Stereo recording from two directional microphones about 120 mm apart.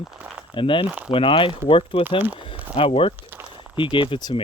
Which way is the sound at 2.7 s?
55° left (ahead or behind).